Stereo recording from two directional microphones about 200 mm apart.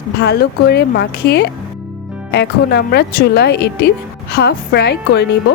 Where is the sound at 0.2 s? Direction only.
55° left (ahead or behind).